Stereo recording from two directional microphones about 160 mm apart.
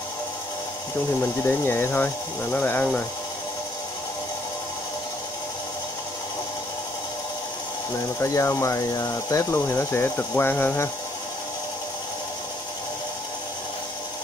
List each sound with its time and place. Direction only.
1.4 s speech: 15° left (ahead or behind)
8.2 s speech: 15° left (ahead or behind)